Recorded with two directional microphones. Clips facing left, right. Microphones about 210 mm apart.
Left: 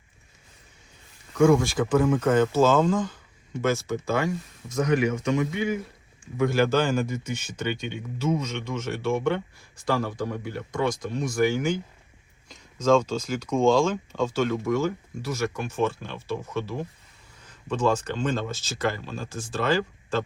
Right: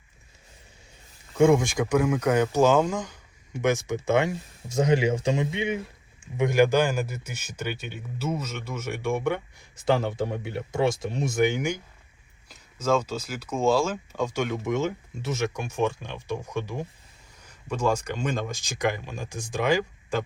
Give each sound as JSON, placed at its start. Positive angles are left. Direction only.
{"t": 1.4, "sound": "speech", "side_deg": -20}
{"t": 9.8, "sound": "speech", "side_deg": -25}